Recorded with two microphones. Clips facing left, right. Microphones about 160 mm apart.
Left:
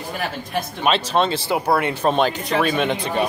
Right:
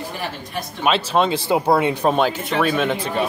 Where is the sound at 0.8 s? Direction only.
10° right (ahead or behind).